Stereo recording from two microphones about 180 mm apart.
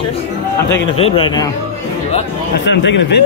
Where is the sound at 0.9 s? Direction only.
30° left (ahead or behind).